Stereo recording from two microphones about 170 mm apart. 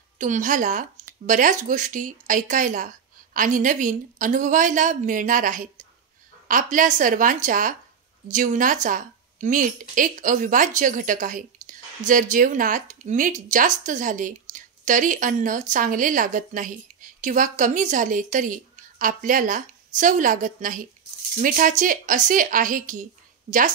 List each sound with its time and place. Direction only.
0.2 s speech: 50° right (ahead or behind)